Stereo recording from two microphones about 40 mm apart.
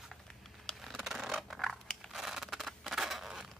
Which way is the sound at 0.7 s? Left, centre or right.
Centre.